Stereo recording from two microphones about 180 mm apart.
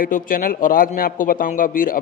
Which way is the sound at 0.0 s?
50° left (ahead or behind).